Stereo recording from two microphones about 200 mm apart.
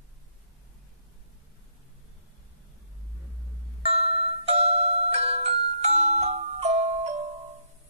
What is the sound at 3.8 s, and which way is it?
Music, 30° right (ahead or behind).